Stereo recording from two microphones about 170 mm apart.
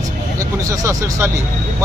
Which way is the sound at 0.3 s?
20° right (ahead or behind).